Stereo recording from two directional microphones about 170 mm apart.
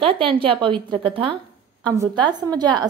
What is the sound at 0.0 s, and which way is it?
A woman's voice, 30° right (ahead or behind).